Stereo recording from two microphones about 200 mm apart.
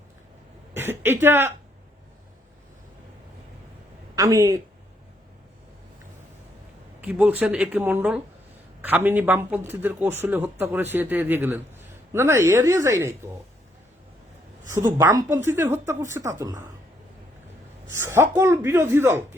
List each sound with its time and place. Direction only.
0.7 s speech: 10° right (ahead or behind)
4.1 s speech: 15° right (ahead or behind)
7.0 s speech: 10° right (ahead or behind)
14.7 s speech: 15° right (ahead or behind)
17.9 s speech: 15° right (ahead or behind)